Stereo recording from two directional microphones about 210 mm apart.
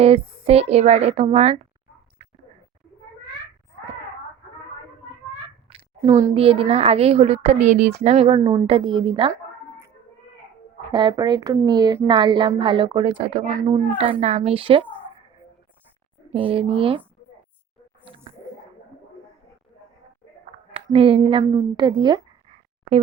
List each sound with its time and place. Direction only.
0.0 s a woman's voice: 30° right (ahead or behind)
5.6 s a woman's voice: 20° right (ahead or behind)
8.4 s a woman's voice: 15° right (ahead or behind)
10.9 s a woman's voice: 20° right (ahead or behind)
16.3 s a woman's voice: 25° right (ahead or behind)
20.7 s a woman's voice: 25° right (ahead or behind)